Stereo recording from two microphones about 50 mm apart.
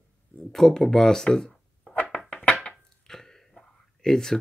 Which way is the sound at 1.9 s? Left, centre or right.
Left.